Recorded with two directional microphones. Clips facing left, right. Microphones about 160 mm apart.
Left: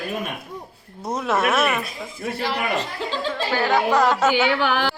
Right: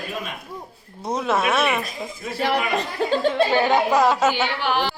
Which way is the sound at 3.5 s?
20° right (ahead or behind).